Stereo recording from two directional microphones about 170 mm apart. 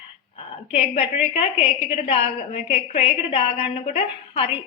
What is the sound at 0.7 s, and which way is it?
A woman's voice, 40° left (ahead or behind).